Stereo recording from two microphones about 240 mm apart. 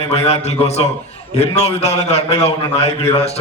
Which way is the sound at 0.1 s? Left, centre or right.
Left.